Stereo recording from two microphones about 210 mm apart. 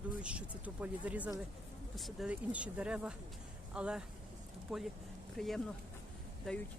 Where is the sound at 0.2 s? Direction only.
5° right (ahead or behind).